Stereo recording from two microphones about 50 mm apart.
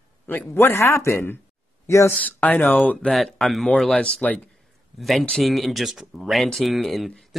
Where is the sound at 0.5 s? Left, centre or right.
Left.